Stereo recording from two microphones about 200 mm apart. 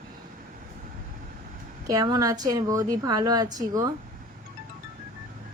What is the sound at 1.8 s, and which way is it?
A woman's voice, 20° right (ahead or behind).